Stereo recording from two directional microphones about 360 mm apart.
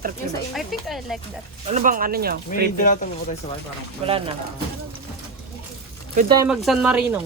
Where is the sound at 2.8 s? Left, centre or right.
Left.